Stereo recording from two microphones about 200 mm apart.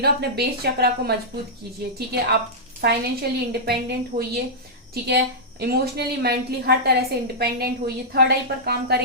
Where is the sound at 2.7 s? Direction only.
50° right (ahead or behind).